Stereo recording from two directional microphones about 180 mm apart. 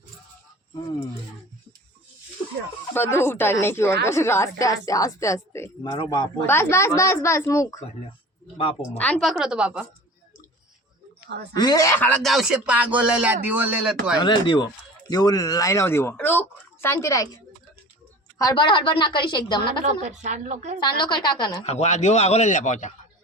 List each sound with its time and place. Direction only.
2.9 s a woman's voice: 15° left (ahead or behind)
6.4 s speech: 15° left (ahead or behind)
9.0 s speech: 5° left (ahead or behind)
11.5 s speech: 20° left (ahead or behind); by 14.2 s 5° right (ahead or behind)
14.2 s a woman's voice: 25° left (ahead or behind)
19.8 s a woman's voice: 40° right (ahead or behind)
21.0 s a woman's voice: 25° left (ahead or behind)
21.6 s a man's voice: 40° left (ahead or behind)